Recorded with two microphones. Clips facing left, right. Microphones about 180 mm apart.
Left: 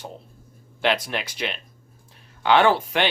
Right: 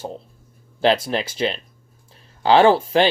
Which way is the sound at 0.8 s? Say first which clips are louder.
Right 5 dB; 30° right (ahead or behind).